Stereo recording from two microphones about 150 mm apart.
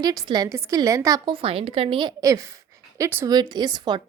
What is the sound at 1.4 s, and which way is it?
A woman's voice, 40° right (ahead or behind).